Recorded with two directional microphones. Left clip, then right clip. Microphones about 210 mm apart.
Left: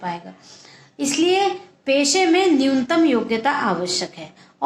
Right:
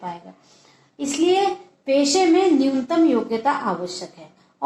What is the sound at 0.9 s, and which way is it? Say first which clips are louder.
A woman's voice: left 1 dB; 40° left (ahead or behind).